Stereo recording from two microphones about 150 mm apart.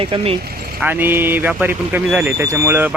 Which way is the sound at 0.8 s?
15° right (ahead or behind).